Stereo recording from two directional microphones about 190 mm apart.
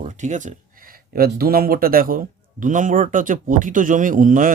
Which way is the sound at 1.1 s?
50° right (ahead or behind).